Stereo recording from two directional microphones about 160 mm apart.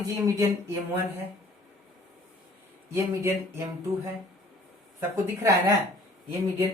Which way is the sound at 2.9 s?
15° right (ahead or behind).